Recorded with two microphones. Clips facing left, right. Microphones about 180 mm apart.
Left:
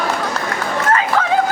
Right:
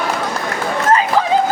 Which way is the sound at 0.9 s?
20° right (ahead or behind).